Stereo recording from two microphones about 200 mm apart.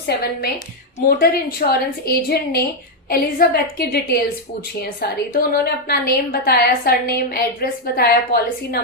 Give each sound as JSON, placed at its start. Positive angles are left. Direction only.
{"t": 0.0, "sound": "a woman's voice", "side_deg": 55}